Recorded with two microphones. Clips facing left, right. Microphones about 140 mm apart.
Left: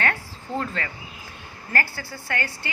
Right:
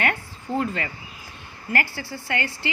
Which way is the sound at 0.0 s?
15° right (ahead or behind).